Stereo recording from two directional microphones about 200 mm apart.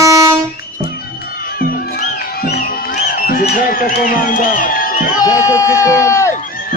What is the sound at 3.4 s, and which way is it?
Speech, 45° left (ahead or behind).